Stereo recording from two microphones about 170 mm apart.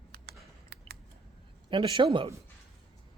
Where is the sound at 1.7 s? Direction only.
30° right (ahead or behind).